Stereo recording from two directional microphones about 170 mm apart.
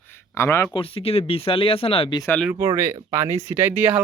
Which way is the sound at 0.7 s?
30° left (ahead or behind).